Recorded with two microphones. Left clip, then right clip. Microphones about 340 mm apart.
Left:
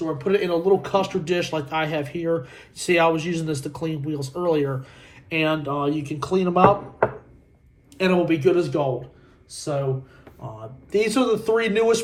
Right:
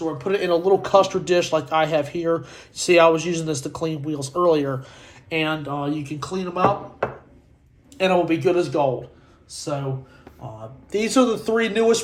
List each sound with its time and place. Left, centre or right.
0.2 s speech: centre
5.3 s speech: centre
7.9 s speech: centre
10.9 s speech: centre